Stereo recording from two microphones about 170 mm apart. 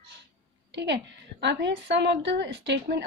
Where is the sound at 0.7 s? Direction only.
90° right.